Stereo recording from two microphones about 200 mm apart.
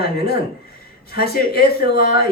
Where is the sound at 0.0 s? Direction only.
50° left (ahead or behind).